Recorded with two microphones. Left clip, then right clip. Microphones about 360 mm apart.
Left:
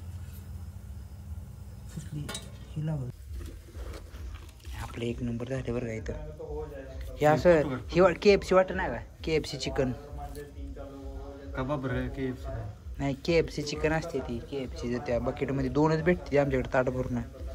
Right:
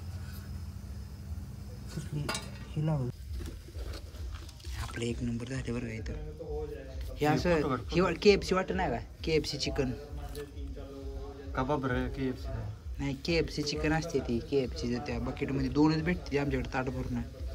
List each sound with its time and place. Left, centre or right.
2.2 s a sound: centre
4.7 s speech: centre
7.2 s speech: centre
11.5 s a man's voice: right
12.9 s speech: centre